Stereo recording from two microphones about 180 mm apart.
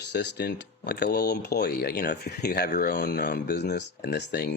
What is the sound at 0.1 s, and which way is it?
Speech, 70° left (ahead or behind).